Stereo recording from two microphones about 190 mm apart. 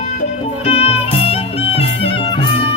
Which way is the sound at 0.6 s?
30° left (ahead or behind).